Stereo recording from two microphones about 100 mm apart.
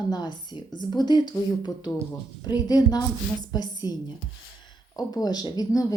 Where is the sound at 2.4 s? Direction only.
45° left (ahead or behind).